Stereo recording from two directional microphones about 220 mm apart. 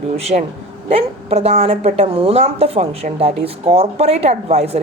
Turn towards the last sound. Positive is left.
turn(degrees=-30)  # may be behind; listen again after turning